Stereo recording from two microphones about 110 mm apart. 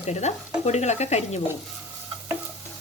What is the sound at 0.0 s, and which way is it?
Speech, 90° left.